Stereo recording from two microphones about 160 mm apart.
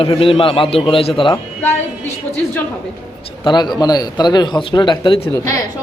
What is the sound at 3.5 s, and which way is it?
A man's voice, 25° left (ahead or behind).